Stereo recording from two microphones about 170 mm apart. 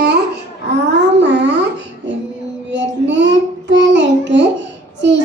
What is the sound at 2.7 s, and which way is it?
Child singing, 90° right.